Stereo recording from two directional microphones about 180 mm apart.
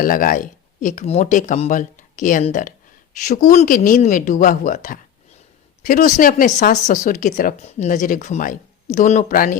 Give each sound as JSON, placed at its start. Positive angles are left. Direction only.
{"t": 0.0, "sound": "speech", "side_deg": 50}